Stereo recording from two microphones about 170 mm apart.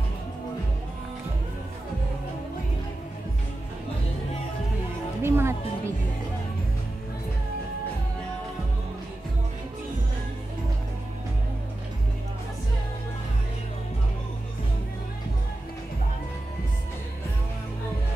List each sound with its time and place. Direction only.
5.2 s music: 15° right (ahead or behind)